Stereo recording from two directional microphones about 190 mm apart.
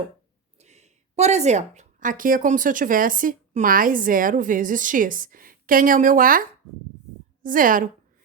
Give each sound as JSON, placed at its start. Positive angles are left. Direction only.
{"t": 0.6, "sound": "a woman's voice", "side_deg": -35}
{"t": 7.4, "sound": "a woman's voice", "side_deg": -45}